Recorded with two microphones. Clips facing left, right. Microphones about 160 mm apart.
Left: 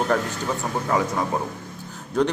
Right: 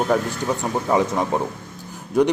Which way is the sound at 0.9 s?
20° right (ahead or behind).